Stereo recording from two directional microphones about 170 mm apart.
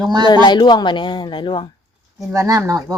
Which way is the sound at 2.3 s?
20° right (ahead or behind).